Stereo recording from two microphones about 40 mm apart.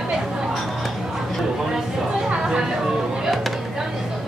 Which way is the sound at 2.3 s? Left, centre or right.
Centre.